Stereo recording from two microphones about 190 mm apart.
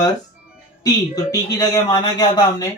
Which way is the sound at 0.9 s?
20° left (ahead or behind).